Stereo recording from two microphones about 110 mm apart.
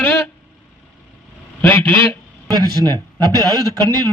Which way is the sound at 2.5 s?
40° right (ahead or behind).